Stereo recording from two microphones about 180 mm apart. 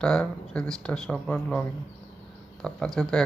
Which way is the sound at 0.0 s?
5° left (ahead or behind).